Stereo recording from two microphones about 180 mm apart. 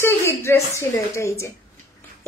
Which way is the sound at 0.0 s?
15° left (ahead or behind).